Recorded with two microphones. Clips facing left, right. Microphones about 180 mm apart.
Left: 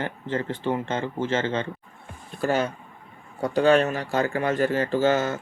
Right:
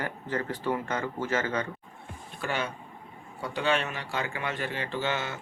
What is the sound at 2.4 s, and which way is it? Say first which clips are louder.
Speech: left 8 dB; 40° left (ahead or behind).